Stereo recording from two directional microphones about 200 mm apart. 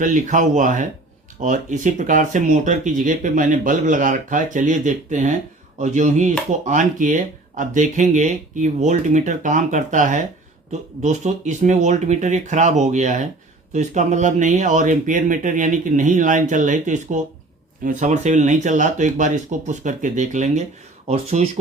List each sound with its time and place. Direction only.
0.0 s speech: 40° right (ahead or behind)